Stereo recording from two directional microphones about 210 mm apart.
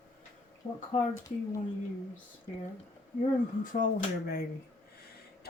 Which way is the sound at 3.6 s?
40° left (ahead or behind).